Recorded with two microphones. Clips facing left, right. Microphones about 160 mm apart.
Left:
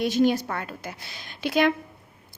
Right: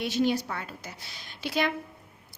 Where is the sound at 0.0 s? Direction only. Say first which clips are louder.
Left 5 dB; 45° left (ahead or behind).